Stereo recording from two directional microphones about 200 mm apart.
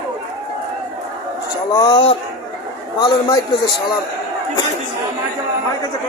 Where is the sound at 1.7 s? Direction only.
20° left (ahead or behind).